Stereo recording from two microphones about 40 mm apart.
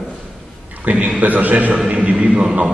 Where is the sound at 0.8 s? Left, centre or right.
Right.